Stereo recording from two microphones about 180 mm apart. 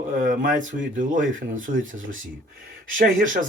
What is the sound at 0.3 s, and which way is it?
Speech, 50° right (ahead or behind).